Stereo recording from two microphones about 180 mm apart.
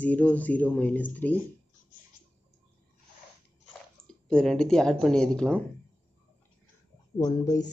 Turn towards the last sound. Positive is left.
turn(degrees=20)  # may be behind; listen again after turning